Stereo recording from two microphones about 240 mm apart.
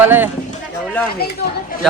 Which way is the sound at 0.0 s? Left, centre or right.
Centre.